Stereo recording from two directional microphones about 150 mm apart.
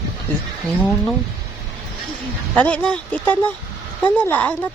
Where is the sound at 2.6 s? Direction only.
10° left (ahead or behind).